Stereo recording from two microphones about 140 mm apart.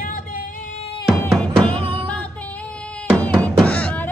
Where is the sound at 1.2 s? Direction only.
10° left (ahead or behind).